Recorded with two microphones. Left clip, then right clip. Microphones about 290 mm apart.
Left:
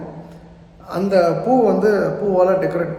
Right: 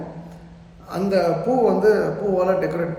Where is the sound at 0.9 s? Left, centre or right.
Centre.